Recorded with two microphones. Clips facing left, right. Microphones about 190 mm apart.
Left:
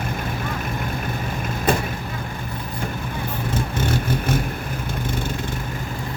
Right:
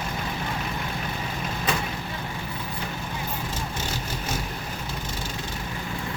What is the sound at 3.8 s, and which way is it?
Vehicle, 55° left (ahead or behind).